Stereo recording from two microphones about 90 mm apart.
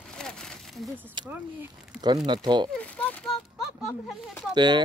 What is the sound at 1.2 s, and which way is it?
Speech, 55° right (ahead or behind).